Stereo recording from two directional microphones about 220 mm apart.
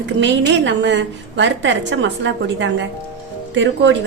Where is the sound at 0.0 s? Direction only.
55° right (ahead or behind).